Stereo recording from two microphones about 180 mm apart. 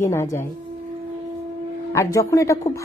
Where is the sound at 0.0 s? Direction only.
15° left (ahead or behind).